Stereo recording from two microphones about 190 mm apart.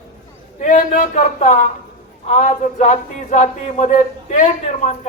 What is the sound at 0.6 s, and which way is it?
A man's voice, 40° left (ahead or behind).